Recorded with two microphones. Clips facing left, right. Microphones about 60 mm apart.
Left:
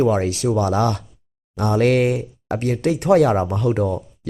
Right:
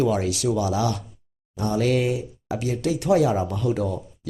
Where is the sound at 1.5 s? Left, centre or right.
Left.